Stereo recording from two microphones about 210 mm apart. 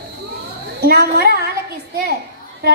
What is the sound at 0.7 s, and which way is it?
Speech, 45° right (ahead or behind).